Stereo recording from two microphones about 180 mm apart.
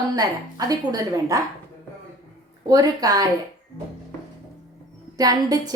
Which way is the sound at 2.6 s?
20° right (ahead or behind).